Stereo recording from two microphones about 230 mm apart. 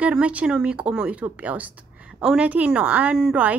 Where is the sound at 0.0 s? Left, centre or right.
Centre.